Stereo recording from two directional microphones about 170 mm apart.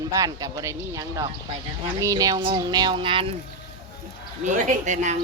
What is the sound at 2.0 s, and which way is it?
Speech, 20° right (ahead or behind).